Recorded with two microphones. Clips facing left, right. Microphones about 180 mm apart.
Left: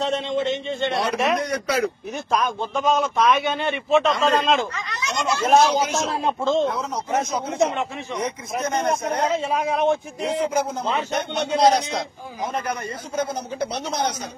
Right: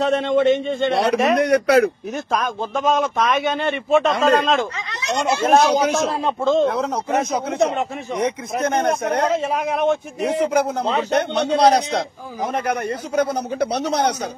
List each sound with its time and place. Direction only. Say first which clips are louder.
0.0 s a man's voice: right 6 dB; 55° right (ahead or behind)
2.7 s a man's voice: right 3 dB; 45° right (ahead or behind)
5.2 s speech: right 3 dB; 30° right (ahead or behind)
5.5 s a man's voice: right 1 dB; 55° right (ahead or behind)